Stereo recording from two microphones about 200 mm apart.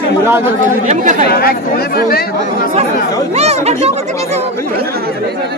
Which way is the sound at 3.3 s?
30° right (ahead or behind).